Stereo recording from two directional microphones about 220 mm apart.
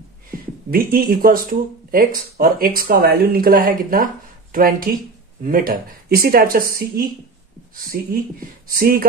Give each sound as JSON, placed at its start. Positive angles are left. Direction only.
{"t": 0.7, "sound": "speech", "side_deg": -40}